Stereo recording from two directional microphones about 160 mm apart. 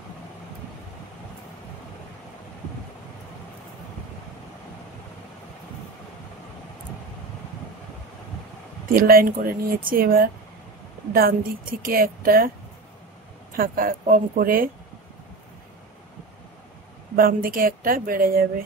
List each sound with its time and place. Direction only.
8.9 s speech: 65° right (ahead or behind)
13.5 s speech: 65° right (ahead or behind)
17.1 s speech: 60° right (ahead or behind)